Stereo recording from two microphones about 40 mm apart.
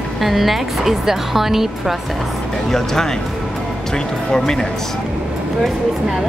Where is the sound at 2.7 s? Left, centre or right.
Centre.